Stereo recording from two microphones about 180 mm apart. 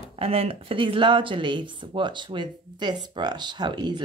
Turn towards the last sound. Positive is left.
turn(degrees=-25)  # may be behind; listen again after turning